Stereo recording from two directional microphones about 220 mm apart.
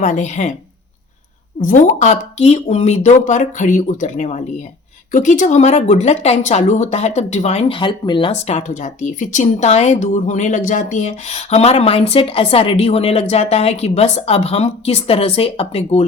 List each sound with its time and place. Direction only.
0.0 s speech: 35° left (ahead or behind)
1.6 s speech: 35° left (ahead or behind)